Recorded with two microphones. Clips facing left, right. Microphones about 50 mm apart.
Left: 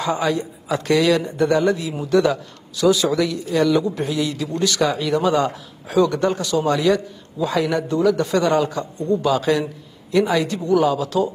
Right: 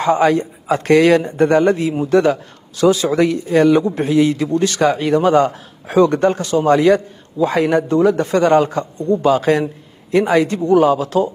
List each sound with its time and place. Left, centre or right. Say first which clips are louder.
0.0 s speech: right 7 dB; right